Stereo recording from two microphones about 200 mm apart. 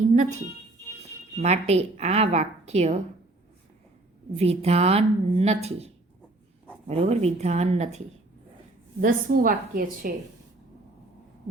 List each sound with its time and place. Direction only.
1.4 s speech: 35° right (ahead or behind)
4.4 s speech: 30° right (ahead or behind)
9.0 s a woman's voice: 45° right (ahead or behind)